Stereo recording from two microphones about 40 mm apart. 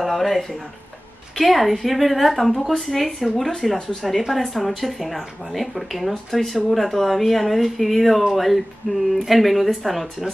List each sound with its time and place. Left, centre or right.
0.0 s speech: centre